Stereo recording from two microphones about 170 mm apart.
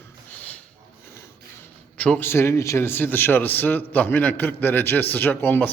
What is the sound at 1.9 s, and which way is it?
A man's voice, 10° left (ahead or behind).